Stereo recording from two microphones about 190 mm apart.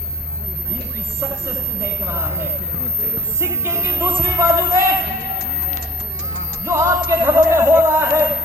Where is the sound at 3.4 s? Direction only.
15° right (ahead or behind).